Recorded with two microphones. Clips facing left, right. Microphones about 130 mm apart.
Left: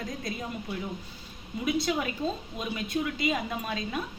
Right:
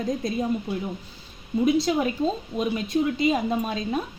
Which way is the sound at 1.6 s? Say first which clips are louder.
Right 7 dB; 30° right (ahead or behind).